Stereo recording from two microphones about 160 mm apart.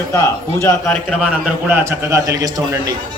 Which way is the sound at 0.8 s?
Centre (ahead or behind).